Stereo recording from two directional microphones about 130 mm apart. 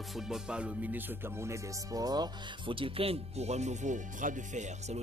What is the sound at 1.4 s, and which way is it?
Speech, 25° right (ahead or behind).